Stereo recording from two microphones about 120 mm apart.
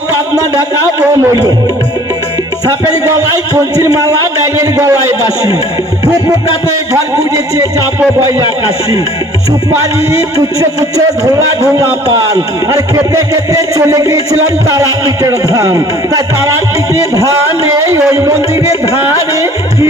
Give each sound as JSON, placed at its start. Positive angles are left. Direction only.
{"t": 0.3, "sound": "speech", "side_deg": -30}
{"t": 3.1, "sound": "speech", "side_deg": -30}
{"t": 6.9, "sound": "speech", "side_deg": -30}
{"t": 9.8, "sound": "speech", "side_deg": -30}
{"t": 12.1, "sound": "speech", "side_deg": -30}